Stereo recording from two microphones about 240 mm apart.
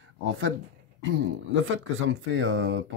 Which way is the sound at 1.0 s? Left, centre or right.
Right.